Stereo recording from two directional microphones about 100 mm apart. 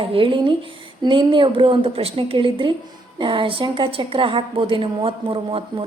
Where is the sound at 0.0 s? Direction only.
60° right (ahead or behind).